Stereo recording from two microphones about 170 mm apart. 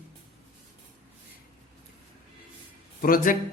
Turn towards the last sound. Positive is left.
turn(degrees=55)  # may be behind; listen again after turning